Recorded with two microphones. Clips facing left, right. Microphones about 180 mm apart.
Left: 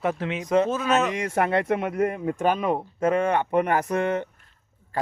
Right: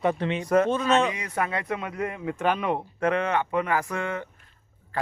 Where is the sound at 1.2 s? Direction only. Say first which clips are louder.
Left 6 dB; 55° left (ahead or behind).